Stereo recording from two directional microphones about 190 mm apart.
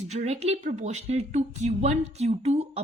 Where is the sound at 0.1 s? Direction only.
35° right (ahead or behind).